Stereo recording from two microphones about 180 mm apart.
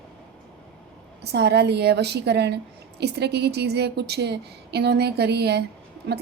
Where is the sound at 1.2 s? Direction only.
65° right (ahead or behind).